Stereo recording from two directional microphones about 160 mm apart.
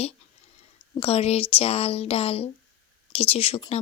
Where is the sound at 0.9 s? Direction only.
40° left (ahead or behind).